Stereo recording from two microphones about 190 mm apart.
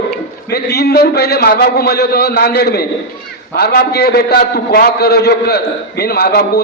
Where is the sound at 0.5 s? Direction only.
55° left (ahead or behind).